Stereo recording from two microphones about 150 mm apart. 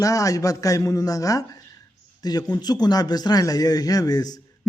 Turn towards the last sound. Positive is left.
turn(degrees=25)  # may be behind; listen again after turning